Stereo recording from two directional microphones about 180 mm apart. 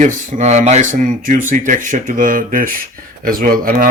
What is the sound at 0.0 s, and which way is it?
A man's voice, 40° right (ahead or behind).